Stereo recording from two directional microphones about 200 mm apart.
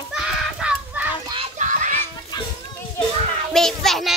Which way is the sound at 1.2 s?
30° right (ahead or behind).